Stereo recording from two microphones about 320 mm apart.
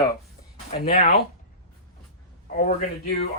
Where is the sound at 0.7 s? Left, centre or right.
Left.